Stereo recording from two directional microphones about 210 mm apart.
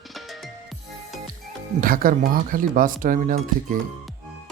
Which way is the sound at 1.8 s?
40° right (ahead or behind).